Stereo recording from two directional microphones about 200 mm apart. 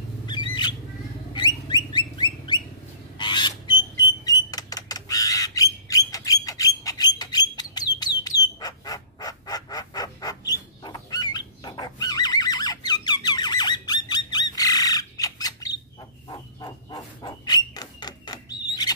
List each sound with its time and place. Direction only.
1.3 s bird: 20° left (ahead or behind)
3.2 s rodents: 20° left (ahead or behind)
3.9 s squawk: 20° left (ahead or behind)
16.3 s a sound: 20° left (ahead or behind)